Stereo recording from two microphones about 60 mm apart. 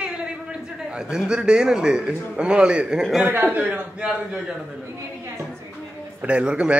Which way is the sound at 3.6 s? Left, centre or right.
Centre.